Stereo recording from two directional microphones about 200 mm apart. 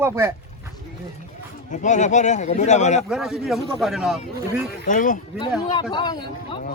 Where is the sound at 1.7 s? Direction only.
40° left (ahead or behind).